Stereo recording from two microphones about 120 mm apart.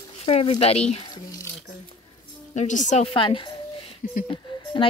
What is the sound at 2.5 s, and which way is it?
Speech, 90° left.